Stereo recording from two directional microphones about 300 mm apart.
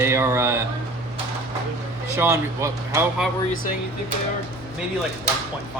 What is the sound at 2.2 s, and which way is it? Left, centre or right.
Speech, centre.